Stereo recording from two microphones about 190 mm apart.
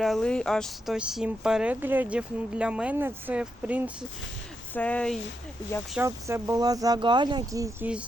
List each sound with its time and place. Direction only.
0.0 s speech: centre (ahead or behind)
4.7 s speech: 10° left (ahead or behind)
6.0 s speech: 15° right (ahead or behind)